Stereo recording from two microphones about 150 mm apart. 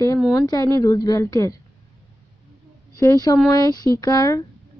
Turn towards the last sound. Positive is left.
turn(degrees=20)  # may be behind; listen again after turning